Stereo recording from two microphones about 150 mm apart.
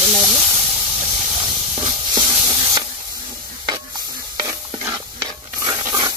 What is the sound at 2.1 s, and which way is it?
Hiss, 25° right (ahead or behind).